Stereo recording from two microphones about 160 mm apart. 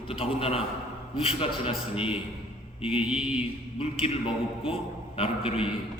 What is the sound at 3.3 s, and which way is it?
A man's voice, 35° left (ahead or behind).